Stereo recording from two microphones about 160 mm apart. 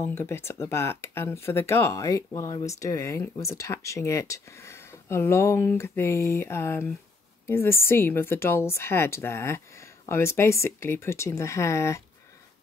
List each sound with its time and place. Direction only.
0.0 s speech: 15° left (ahead or behind)